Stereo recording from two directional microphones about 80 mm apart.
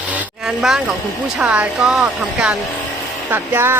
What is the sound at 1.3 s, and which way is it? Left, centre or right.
Speech, centre.